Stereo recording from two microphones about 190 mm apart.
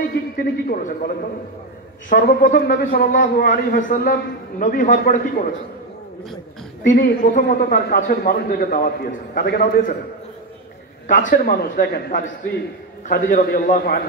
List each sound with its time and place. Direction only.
0.1 s a man's voice: 45° left (ahead or behind)
6.9 s a man's voice: 45° left (ahead or behind)
11.1 s a man's voice: 45° left (ahead or behind)